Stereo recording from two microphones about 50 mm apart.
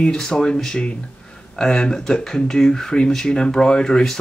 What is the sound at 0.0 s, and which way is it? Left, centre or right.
Speech, centre.